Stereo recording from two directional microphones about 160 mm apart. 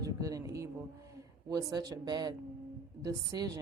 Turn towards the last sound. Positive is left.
turn(degrees=-20)  # may be behind; listen again after turning